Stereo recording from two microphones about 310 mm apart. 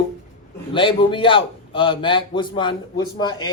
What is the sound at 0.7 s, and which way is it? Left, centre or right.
A man's voice, centre.